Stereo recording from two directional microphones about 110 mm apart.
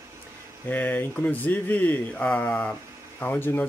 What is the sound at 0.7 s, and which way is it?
Speech, 15° left (ahead or behind).